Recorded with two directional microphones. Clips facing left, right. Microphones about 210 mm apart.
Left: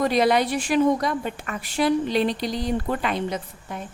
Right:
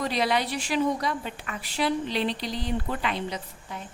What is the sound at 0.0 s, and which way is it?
A woman's voice, 50° left (ahead or behind).